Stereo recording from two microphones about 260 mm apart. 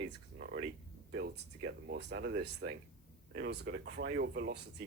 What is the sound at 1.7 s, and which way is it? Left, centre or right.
Speech, right.